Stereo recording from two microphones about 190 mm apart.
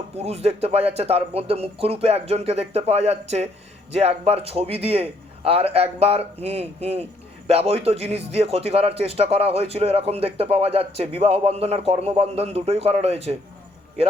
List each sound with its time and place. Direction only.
0.2 s a man's voice: 35° right (ahead or behind)